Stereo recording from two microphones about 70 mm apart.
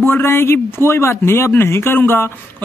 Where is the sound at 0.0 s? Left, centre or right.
Left.